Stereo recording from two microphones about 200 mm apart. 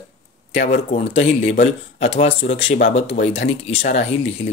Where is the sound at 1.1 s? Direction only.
30° left (ahead or behind).